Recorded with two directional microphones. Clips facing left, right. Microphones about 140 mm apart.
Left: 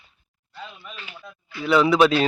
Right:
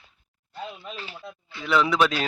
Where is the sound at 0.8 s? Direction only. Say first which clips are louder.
Right 3 dB; 35° right (ahead or behind).